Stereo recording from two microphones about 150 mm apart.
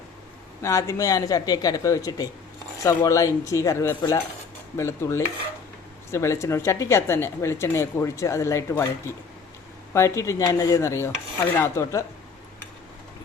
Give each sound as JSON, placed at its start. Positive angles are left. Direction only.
{"t": 0.6, "sound": "a woman's voice", "side_deg": 20}
{"t": 4.8, "sound": "dishes", "side_deg": 15}
{"t": 6.1, "sound": "a woman's voice", "side_deg": 20}